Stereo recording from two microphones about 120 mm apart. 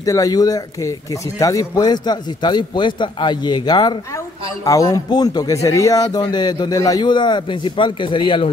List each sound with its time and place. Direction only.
0.0 s speech: 30° left (ahead or behind); by 8.5 s 45° left (ahead or behind)